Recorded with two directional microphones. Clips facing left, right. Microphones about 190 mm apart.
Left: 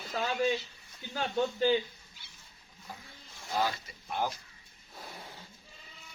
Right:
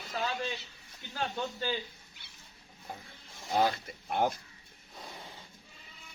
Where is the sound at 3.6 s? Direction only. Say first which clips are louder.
Right 4 dB; 55° right (ahead or behind).